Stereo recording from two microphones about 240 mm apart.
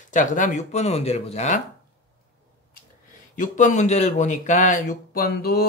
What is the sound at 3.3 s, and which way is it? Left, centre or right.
Speech, left.